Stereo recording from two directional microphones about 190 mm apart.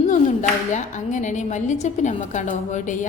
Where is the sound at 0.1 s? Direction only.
40° left (ahead or behind).